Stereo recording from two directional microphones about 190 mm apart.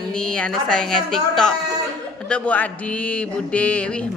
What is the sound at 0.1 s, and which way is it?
Speech, 5° left (ahead or behind).